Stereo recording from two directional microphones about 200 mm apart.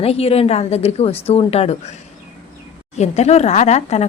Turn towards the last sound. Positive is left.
turn(degrees=35)  # may be behind; listen again after turning